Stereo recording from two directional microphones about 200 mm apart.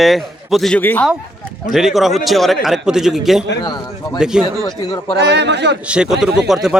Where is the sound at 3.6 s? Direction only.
20° left (ahead or behind).